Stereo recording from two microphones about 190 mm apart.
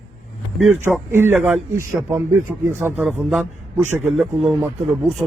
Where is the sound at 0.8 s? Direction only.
10° right (ahead or behind).